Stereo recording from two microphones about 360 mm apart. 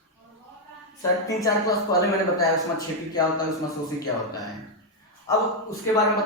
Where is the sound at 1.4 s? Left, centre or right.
Centre.